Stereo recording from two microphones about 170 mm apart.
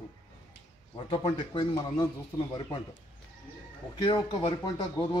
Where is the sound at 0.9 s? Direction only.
30° left (ahead or behind).